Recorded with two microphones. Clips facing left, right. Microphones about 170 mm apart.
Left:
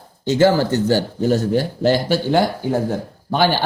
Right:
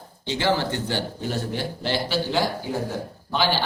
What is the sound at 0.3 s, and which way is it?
Speech, 45° left (ahead or behind).